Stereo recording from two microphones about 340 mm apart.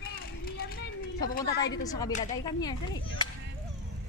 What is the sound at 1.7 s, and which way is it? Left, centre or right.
Speech, centre.